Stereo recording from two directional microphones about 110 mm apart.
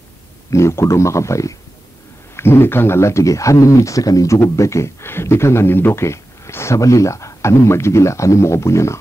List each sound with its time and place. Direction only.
0.5 s speech: 25° left (ahead or behind)